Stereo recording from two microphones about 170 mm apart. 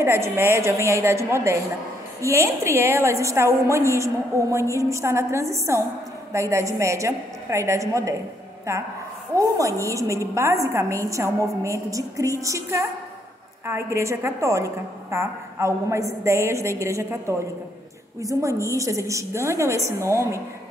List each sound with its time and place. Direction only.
0.0 s a woman's voice: 15° right (ahead or behind)
9.3 s a woman's voice: 20° right (ahead or behind)